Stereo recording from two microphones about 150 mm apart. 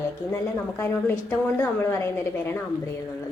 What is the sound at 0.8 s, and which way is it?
A woman's voice, 15° left (ahead or behind).